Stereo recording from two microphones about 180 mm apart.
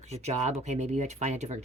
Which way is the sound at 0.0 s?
40° right (ahead or behind).